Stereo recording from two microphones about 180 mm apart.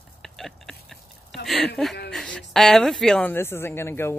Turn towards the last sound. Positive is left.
turn(degrees=15)  # may be behind; listen again after turning